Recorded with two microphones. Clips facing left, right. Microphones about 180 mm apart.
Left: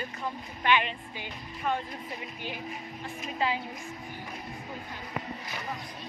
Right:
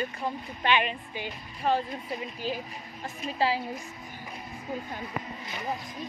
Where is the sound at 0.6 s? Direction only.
20° right (ahead or behind).